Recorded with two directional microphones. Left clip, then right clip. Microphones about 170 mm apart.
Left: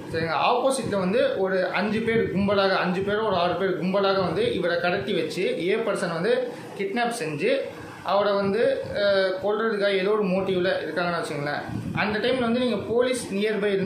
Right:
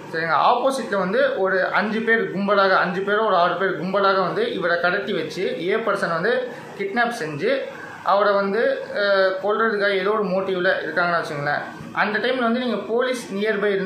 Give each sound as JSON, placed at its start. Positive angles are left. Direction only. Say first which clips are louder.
{"t": 0.3, "sound": "a man's voice", "louder": "right 4 dB", "side_deg": 10}
{"t": 8.1, "sound": "a man's voice", "louder": "right 4 dB", "side_deg": 10}